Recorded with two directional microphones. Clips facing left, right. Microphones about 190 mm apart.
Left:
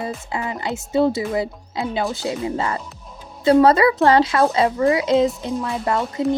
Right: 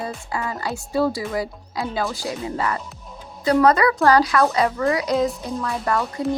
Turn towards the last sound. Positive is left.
turn(degrees=25)  # may be behind; listen again after turning